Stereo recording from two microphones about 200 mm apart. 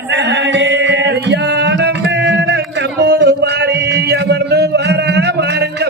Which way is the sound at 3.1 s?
55° right (ahead or behind).